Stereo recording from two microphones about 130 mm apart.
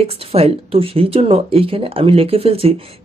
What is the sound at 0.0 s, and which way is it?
Speech, 50° right (ahead or behind).